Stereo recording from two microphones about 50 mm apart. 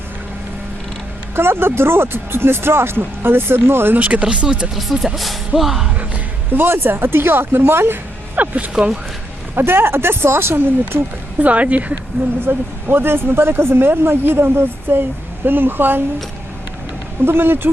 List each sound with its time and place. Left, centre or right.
1.4 s speech: right
3.9 s speech: right
4.7 s speech: centre
6.5 s speech: right
8.4 s speech: right
9.6 s speech: right
11.3 s speech: right
12.5 s speech: right
17.2 s speech: right